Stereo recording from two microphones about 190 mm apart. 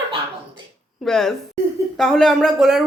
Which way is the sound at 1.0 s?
Centre (ahead or behind).